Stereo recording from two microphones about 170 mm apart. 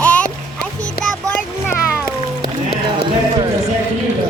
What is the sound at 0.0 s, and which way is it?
Music, 10° left (ahead or behind).